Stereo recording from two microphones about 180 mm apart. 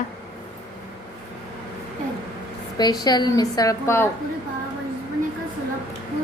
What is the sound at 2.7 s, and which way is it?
A woman's voice, 20° left (ahead or behind).